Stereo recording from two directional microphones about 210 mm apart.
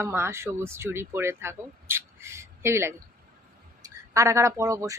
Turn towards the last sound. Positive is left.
turn(degrees=-15)  # may be behind; listen again after turning